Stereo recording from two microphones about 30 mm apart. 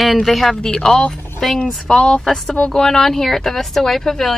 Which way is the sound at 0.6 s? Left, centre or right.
Left.